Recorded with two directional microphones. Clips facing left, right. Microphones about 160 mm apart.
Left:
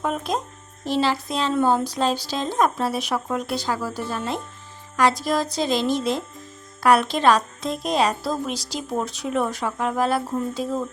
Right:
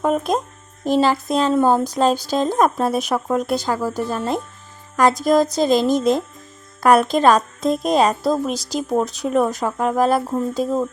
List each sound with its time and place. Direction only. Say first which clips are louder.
0.0 s a woman's voice: right 6 dB; 45° right (ahead or behind)